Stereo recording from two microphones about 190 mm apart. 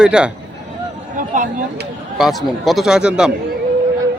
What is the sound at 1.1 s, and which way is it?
Speech, 45° right (ahead or behind).